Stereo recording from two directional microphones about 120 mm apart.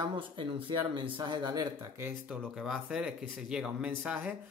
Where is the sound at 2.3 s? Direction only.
5° right (ahead or behind).